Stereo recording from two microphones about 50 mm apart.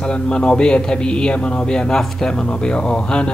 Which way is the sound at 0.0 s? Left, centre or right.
Centre.